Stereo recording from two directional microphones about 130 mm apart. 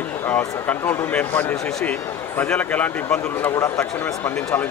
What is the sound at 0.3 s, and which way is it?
A man's voice, 15° left (ahead or behind).